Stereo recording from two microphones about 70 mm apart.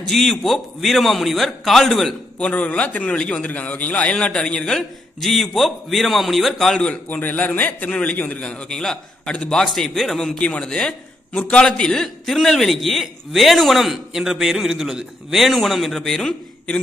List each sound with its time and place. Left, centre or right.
0.1 s a man's voice: centre
2.3 s a man's voice: centre
6.8 s a man's voice: left